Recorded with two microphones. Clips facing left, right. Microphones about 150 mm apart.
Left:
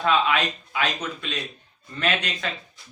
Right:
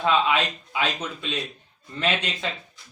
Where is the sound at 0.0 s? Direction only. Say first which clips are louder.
Even; 20° right (ahead or behind).